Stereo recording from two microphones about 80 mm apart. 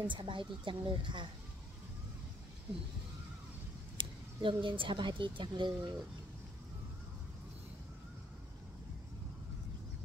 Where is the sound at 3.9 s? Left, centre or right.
Right.